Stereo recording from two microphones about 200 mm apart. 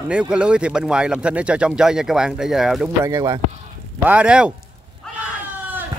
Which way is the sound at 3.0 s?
15° right (ahead or behind).